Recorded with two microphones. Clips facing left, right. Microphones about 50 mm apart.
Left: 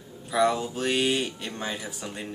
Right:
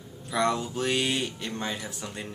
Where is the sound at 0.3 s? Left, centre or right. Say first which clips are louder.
Left 3 dB; centre.